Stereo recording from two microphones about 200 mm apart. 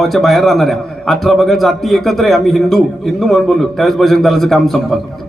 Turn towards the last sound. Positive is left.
turn(degrees=0)  # may be behind; listen again after turning